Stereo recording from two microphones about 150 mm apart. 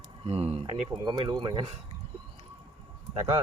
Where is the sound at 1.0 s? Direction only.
30° right (ahead or behind).